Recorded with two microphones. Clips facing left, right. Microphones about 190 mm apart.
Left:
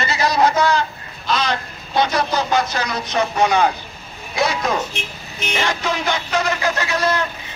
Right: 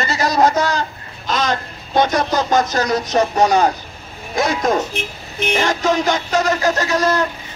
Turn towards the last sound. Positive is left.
turn(degrees=-40)  # may be behind; listen again after turning